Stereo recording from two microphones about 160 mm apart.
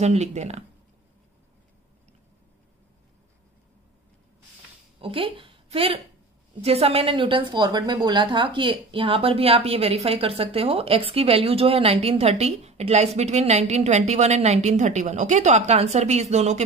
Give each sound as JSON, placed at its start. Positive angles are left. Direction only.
{"t": 0.0, "sound": "speech", "side_deg": -45}
{"t": 5.0, "sound": "a woman's voice", "side_deg": -35}